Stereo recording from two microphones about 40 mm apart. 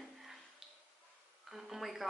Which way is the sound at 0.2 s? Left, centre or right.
Centre.